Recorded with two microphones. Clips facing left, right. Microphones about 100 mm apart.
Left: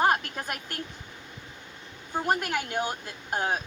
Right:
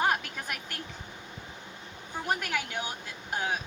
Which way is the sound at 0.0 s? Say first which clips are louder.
Left 4 dB; 40° left (ahead or behind).